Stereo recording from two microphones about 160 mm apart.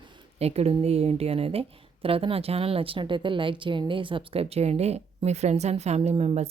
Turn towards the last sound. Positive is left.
turn(degrees=-40)  # may be behind; listen again after turning